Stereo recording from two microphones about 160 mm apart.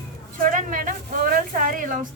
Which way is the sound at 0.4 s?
55° right (ahead or behind).